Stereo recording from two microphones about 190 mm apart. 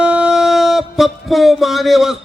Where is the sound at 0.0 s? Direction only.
5° right (ahead or behind).